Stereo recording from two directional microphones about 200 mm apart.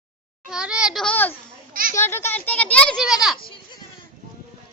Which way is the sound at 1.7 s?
45° right (ahead or behind).